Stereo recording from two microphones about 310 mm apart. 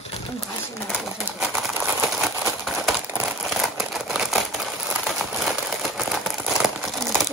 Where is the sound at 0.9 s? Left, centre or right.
Centre.